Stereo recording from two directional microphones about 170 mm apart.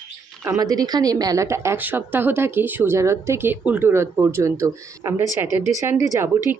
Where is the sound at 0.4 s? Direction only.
20° right (ahead or behind).